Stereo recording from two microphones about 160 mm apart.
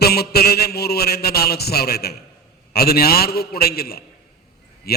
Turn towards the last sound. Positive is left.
turn(degrees=75)  # may be behind; listen again after turning